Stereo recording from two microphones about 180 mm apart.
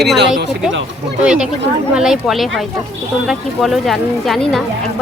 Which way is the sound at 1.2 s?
5° right (ahead or behind).